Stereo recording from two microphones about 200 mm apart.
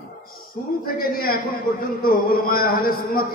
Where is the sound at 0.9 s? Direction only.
50° left (ahead or behind).